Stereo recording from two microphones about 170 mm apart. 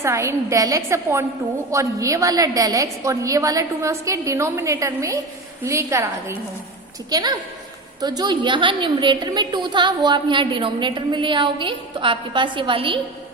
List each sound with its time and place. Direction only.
0.0 s a woman's voice: 15° right (ahead or behind)